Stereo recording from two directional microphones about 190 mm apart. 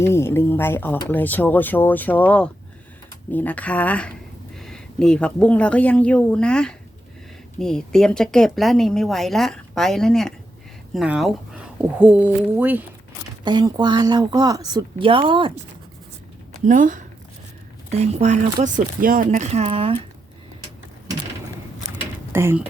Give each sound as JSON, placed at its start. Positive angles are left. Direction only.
{"t": 0.0, "sound": "speech", "side_deg": 15}
{"t": 13.4, "sound": "a woman's voice", "side_deg": -25}
{"t": 16.6, "sound": "speech", "side_deg": -40}
{"t": 22.3, "sound": "speech", "side_deg": -10}